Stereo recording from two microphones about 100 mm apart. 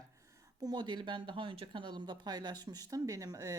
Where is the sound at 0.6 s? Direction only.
50° right (ahead or behind).